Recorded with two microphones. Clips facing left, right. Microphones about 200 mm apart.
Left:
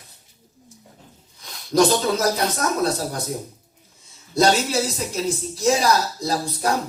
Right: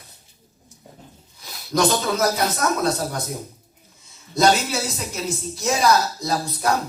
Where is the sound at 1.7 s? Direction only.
35° left (ahead or behind).